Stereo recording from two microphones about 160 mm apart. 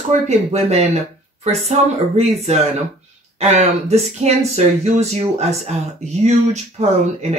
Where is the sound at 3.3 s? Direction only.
45° right (ahead or behind).